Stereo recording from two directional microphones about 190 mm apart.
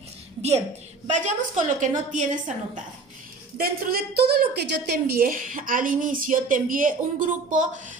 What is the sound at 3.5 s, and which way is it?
A woman's voice, 50° right (ahead or behind).